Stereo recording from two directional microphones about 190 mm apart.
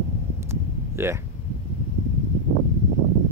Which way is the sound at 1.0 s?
10° right (ahead or behind).